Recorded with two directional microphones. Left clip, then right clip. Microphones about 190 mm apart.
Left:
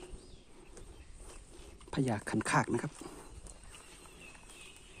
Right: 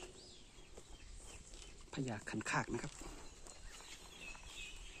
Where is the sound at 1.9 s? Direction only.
30° left (ahead or behind).